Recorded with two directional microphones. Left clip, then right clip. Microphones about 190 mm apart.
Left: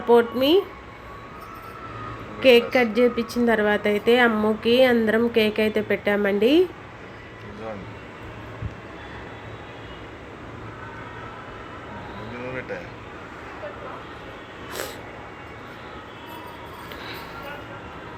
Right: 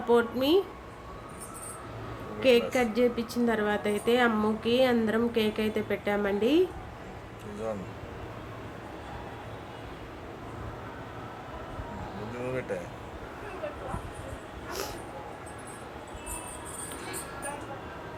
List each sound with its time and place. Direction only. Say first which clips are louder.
0.1 s a woman's voice: left 7 dB; 15° left (ahead or behind)
2.4 s a woman's voice: left 7 dB; 15° left (ahead or behind)